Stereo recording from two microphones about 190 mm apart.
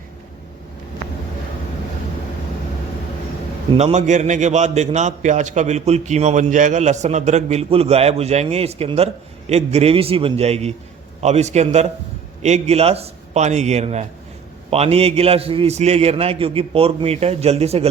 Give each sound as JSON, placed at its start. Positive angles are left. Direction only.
{"t": 3.7, "sound": "a man's voice", "side_deg": -30}